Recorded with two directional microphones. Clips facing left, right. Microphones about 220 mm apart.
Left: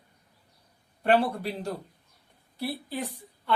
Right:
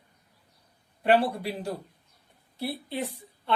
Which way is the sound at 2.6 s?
25° right (ahead or behind).